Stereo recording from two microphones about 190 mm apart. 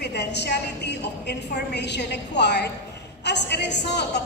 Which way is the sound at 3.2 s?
65° left (ahead or behind).